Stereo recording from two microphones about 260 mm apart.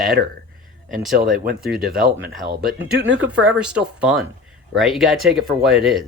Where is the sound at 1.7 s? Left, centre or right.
Right.